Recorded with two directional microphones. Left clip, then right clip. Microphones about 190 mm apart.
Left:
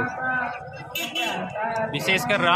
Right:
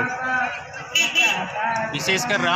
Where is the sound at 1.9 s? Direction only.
30° left (ahead or behind).